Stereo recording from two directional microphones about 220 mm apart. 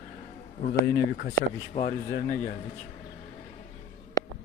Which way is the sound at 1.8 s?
35° left (ahead or behind).